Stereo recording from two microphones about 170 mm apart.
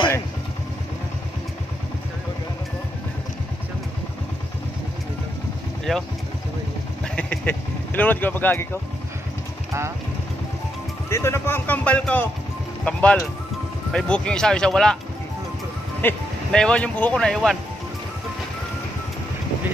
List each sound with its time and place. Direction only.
5.9 s speech: centre (ahead or behind)
7.2 s vehicle: 10° left (ahead or behind)
9.7 s vehicle: 15° right (ahead or behind)
11.1 s a man's voice: 15° left (ahead or behind)
16.0 s speech: 10° left (ahead or behind)